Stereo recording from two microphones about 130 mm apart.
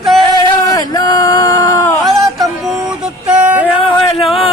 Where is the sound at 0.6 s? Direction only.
30° left (ahead or behind).